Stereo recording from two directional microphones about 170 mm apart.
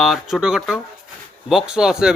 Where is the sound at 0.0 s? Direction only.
Centre (ahead or behind).